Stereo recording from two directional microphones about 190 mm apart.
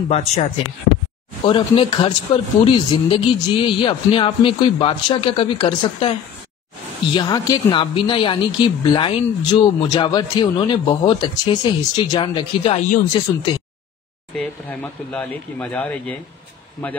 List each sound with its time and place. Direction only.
0.1 s speech: 35° left (ahead or behind)
1.4 s a woman's voice: 25° left (ahead or behind)
7.2 s a woman's voice: 20° left (ahead or behind)
14.3 s speech: 5° left (ahead or behind)